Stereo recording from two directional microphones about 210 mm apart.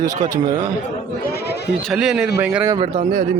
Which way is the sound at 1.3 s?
50° left (ahead or behind).